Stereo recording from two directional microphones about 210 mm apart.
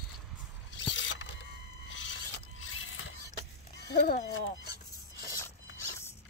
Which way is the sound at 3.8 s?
50° left (ahead or behind).